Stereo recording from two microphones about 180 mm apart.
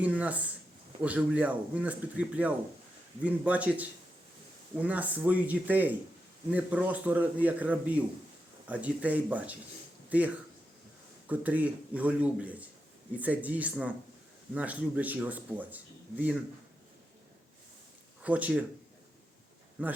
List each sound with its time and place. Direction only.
0.0 s speech: 5° right (ahead or behind)
18.2 s speech: 10° right (ahead or behind)